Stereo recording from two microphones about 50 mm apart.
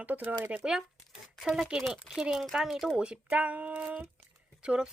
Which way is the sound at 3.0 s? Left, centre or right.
Right.